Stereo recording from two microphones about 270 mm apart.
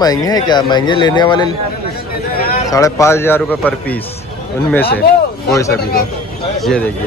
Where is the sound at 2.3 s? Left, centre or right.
Left.